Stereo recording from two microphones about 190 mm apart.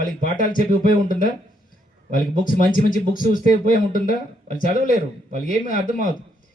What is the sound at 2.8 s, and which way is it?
Speech, 45° left (ahead or behind).